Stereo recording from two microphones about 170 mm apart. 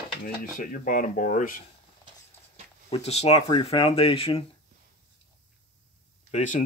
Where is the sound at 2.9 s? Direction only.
40° left (ahead or behind).